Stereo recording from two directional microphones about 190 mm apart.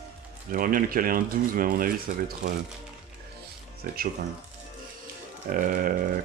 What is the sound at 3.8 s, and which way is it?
Speech, 50° right (ahead or behind).